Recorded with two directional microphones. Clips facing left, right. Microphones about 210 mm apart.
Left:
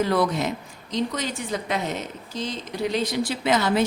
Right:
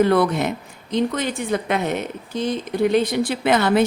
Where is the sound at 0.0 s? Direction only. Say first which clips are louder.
Right 5 dB; 60° right (ahead or behind).